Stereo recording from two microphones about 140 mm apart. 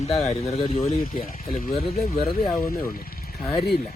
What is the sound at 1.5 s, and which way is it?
Speech, 80° left.